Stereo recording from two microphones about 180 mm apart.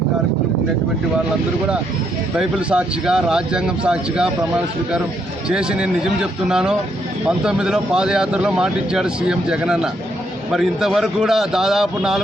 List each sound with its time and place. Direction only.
2.4 s speech: 5° right (ahead or behind)
5.5 s speech: 5° right (ahead or behind)